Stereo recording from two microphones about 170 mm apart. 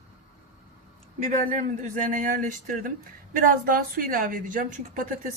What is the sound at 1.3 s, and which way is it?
A woman's voice, 45° right (ahead or behind).